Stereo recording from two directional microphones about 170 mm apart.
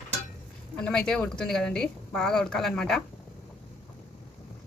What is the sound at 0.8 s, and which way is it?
A woman's voice, 5° left (ahead or behind).